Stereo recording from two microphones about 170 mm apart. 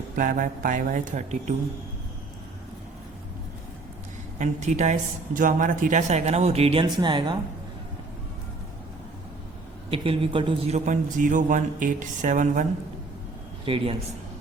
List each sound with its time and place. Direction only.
0.2 s a man's voice: 55° right (ahead or behind)
4.4 s a man's voice: 45° right (ahead or behind); by 7.3 s 30° right (ahead or behind)
9.9 s a man's voice: 30° right (ahead or behind); by 12.6 s 50° right (ahead or behind)
13.7 s a man's voice: 30° right (ahead or behind)